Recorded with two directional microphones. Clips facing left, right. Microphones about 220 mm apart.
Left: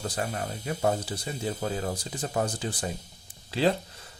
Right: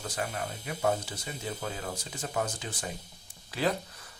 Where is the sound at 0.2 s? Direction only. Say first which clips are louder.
Even; 35° left (ahead or behind).